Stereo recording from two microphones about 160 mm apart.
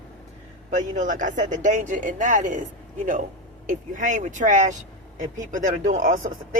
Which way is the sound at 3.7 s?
55° right (ahead or behind).